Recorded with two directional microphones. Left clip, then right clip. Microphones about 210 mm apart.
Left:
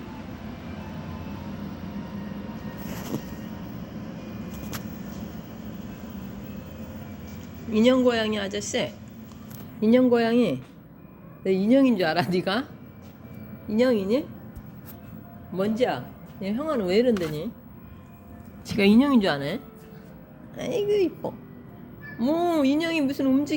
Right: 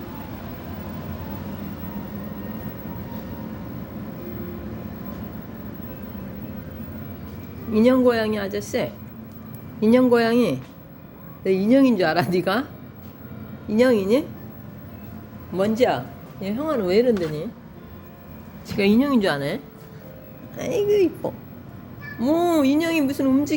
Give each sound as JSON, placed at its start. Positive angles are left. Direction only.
{"t": 7.7, "sound": "a woman's voice", "side_deg": -5}
{"t": 13.7, "sound": "a woman's voice", "side_deg": 0}
{"t": 15.5, "sound": "a man's voice", "side_deg": -10}
{"t": 16.4, "sound": "speech", "side_deg": 5}
{"t": 18.7, "sound": "a woman's voice", "side_deg": 25}